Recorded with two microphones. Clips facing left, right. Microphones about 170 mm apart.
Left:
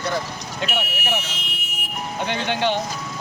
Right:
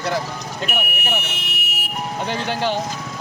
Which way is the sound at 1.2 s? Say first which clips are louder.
Right 3 dB; 65° right (ahead or behind).